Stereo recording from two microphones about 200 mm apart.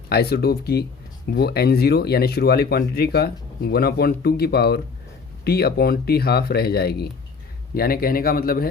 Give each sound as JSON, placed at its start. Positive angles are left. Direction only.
{"t": 0.1, "sound": "speech", "side_deg": 50}